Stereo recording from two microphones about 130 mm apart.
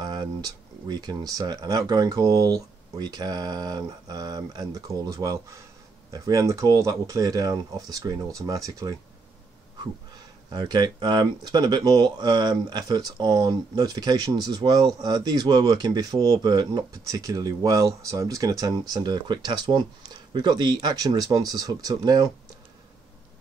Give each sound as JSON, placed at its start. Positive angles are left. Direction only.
{"t": 0.0, "sound": "a sound", "side_deg": -30}
{"t": 0.8, "sound": "speech", "side_deg": -30}
{"t": 10.1, "sound": "speech", "side_deg": -30}